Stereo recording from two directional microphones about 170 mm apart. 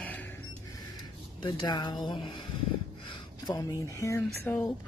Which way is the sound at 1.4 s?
25° left (ahead or behind).